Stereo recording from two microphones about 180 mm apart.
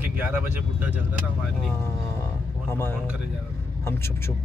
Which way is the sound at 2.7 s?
15° left (ahead or behind).